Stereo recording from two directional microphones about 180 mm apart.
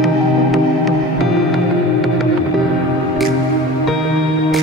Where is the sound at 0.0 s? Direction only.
Centre (ahead or behind).